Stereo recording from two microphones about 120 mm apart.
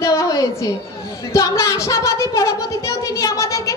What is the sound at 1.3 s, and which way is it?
Speech, 25° left (ahead or behind).